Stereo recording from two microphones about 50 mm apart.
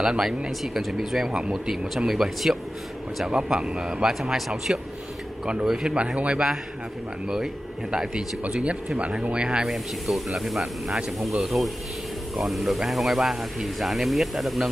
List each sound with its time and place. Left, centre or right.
0.2 s speech: centre
0.5 s speech: centre
4.1 s speech: centre
5.4 s speech: centre
9.7 s speech: centre